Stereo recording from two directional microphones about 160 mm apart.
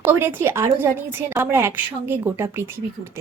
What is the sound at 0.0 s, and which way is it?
Speech, 10° right (ahead or behind).